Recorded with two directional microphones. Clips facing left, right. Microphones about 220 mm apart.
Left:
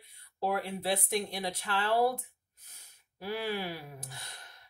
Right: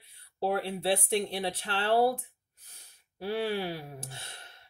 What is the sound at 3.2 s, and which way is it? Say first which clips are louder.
Speech: right 4 dB; 35° right (ahead or behind).